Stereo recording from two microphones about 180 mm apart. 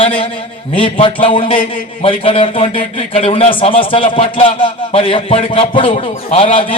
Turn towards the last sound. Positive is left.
turn(degrees=30)  # may be behind; listen again after turning